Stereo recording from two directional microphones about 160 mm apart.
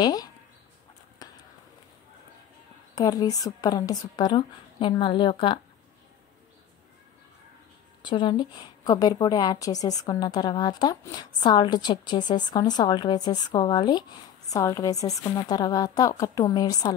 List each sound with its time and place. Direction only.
0.0 s a woman's voice: 25° left (ahead or behind)
1.2 s a sound: 25° left (ahead or behind)
2.9 s a woman's voice: 20° left (ahead or behind)
8.0 s a woman's voice: 30° left (ahead or behind)